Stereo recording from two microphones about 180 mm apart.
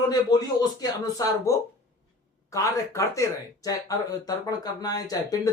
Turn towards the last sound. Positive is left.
turn(degrees=20)  # may be behind; listen again after turning